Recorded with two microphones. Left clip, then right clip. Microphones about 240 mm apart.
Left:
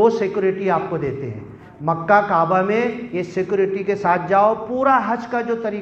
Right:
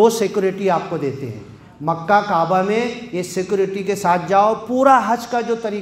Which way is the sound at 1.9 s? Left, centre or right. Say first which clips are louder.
Even; right.